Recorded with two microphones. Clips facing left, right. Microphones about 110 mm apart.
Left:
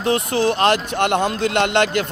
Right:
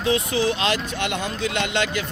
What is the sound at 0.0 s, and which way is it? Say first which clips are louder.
Speech: left 3 dB; 50° left (ahead or behind).